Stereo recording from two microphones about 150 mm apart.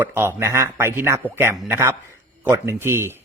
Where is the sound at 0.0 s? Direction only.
15° right (ahead or behind).